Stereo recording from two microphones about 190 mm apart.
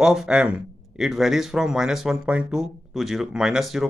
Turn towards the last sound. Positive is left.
turn(degrees=0)  # may be behind; listen again after turning